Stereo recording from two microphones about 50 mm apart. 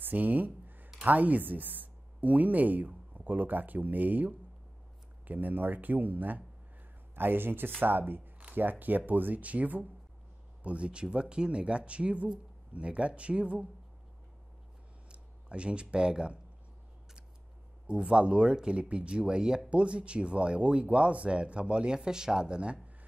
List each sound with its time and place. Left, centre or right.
0.0 s a sound: right
1.0 s speech: right
15.0 s speech: right
17.8 s speech: centre